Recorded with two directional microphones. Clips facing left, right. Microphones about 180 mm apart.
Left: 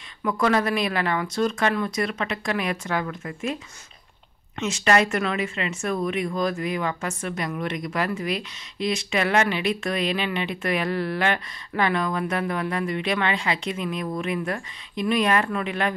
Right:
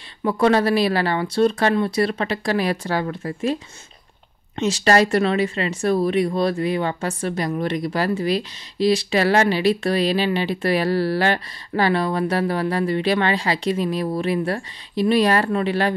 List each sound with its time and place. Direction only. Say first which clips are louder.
0.2 s speech: right 5 dB; 30° right (ahead or behind)
4.6 s speech: right 4 dB; 35° right (ahead or behind)